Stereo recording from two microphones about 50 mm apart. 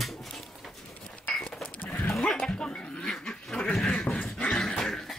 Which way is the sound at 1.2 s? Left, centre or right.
Centre.